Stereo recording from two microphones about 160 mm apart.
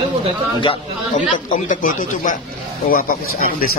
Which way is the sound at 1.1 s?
55° left (ahead or behind).